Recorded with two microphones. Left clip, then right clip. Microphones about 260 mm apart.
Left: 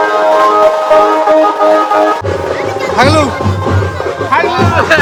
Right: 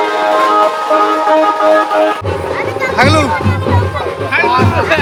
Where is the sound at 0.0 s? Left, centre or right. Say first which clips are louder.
Left 3 dB; left.